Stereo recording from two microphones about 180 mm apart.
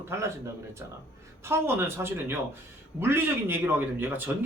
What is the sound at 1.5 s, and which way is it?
Speech, 10° right (ahead or behind).